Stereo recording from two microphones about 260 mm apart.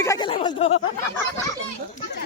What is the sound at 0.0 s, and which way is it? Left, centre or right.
Speech, centre.